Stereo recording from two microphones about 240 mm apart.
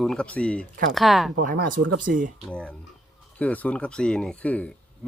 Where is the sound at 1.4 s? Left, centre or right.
Right.